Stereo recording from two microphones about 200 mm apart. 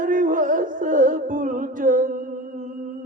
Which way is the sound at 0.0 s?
40° right (ahead or behind).